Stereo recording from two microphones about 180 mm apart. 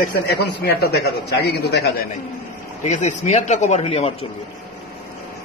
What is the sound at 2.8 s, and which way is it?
Speech, 40° left (ahead or behind).